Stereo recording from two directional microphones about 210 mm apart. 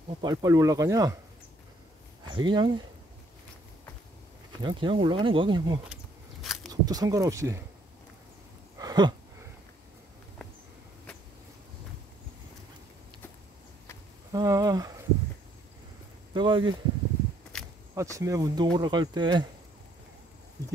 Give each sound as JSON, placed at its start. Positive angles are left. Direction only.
{"t": 0.2, "sound": "speech", "side_deg": -20}
{"t": 2.3, "sound": "speech", "side_deg": -20}
{"t": 4.6, "sound": "speech", "side_deg": -25}
{"t": 6.4, "sound": "a sound", "side_deg": 0}
{"t": 6.7, "sound": "speech", "side_deg": -15}
{"t": 8.7, "sound": "a sound", "side_deg": -20}
{"t": 14.3, "sound": "speech", "side_deg": -15}
{"t": 16.3, "sound": "speech", "side_deg": -20}
{"t": 17.5, "sound": "a sound", "side_deg": 5}
{"t": 17.9, "sound": "speech", "side_deg": -15}